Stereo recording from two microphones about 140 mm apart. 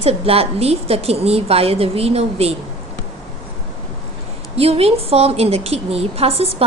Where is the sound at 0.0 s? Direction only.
45° right (ahead or behind).